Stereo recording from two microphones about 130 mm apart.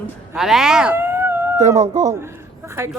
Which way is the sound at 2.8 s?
20° right (ahead or behind).